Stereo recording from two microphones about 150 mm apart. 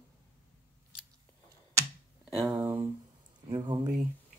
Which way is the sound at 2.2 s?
5° right (ahead or behind).